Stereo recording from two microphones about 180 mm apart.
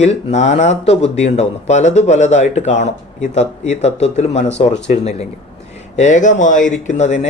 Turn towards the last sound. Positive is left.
turn(degrees=40)  # may be behind; listen again after turning